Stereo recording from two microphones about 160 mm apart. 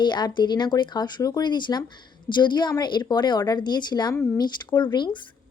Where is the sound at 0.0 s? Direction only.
30° left (ahead or behind).